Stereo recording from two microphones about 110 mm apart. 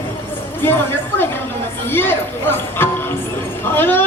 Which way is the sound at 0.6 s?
20° left (ahead or behind).